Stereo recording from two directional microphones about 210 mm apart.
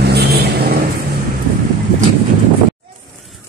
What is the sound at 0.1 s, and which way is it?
Vehicle, 50° right (ahead or behind).